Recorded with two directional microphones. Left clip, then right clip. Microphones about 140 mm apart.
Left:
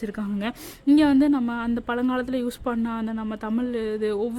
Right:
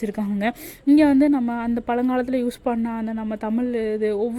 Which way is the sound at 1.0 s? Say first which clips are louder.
Right 3 dB; 15° right (ahead or behind).